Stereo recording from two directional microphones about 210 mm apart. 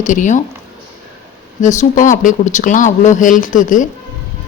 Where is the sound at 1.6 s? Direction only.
35° left (ahead or behind).